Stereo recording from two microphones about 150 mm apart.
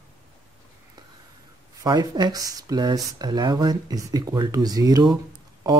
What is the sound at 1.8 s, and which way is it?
Speech, 30° right (ahead or behind).